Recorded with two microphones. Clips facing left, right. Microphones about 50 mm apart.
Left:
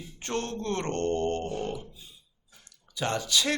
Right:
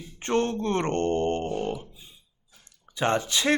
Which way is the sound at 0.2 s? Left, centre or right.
Right.